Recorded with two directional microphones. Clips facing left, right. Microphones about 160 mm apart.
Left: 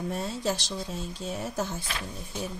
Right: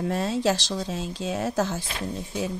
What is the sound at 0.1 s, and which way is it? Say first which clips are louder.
Speech: right 7 dB; 90° right.